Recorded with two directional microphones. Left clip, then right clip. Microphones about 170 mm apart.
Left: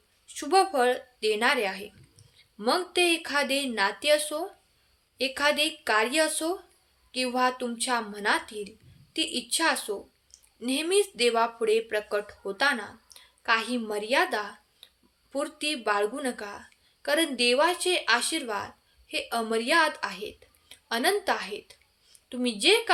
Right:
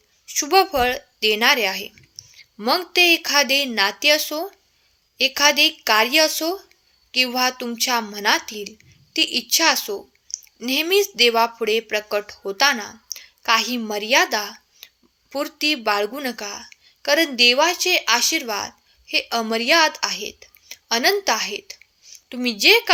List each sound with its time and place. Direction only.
0.3 s a woman's voice: 35° right (ahead or behind)